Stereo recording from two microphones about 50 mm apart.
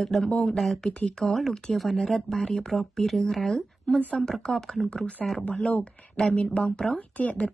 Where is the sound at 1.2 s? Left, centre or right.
Centre.